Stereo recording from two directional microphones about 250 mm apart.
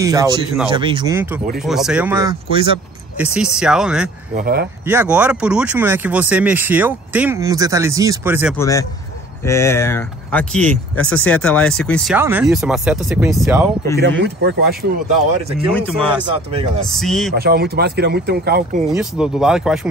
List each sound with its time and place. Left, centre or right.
0.0 s speech: centre
3.2 s speech: centre
4.4 s speech: right
4.8 s speech: centre
8.5 s speech: centre
13.9 s speech: right
16.9 s speech: centre
17.4 s speech: right
18.9 s speech: centre